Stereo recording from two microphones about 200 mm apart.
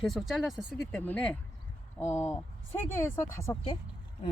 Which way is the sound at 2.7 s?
10° left (ahead or behind).